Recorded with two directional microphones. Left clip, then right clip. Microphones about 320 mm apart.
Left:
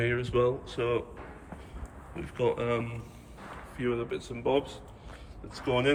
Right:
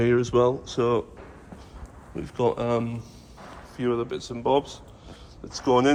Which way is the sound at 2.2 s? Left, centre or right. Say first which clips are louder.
Right 4 dB; centre.